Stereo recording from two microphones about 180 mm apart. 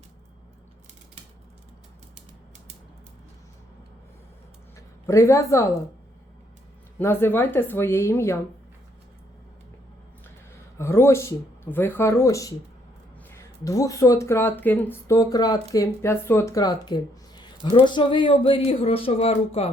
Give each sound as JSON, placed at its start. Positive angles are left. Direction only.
{"t": 5.0, "sound": "speech", "side_deg": 15}
{"t": 7.0, "sound": "speech", "side_deg": 15}
{"t": 10.8, "sound": "speech", "side_deg": 15}